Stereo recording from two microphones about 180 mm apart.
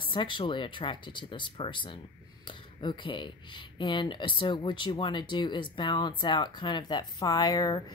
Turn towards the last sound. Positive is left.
turn(degrees=20)  # may be behind; listen again after turning